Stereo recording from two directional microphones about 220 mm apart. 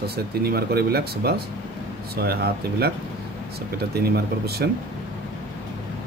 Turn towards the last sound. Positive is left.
turn(degrees=-45)  # may be behind; listen again after turning